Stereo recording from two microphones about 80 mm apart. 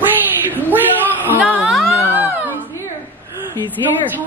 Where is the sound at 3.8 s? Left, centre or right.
Right.